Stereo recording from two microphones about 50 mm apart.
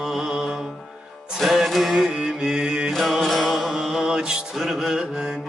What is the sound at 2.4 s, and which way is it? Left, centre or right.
Mantra, centre.